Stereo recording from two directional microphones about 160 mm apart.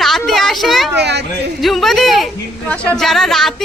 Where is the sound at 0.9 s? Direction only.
90° right.